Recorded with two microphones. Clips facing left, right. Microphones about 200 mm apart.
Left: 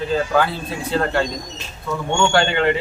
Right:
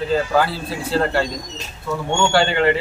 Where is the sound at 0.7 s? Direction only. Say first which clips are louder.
Right 1 dB; 5° right (ahead or behind).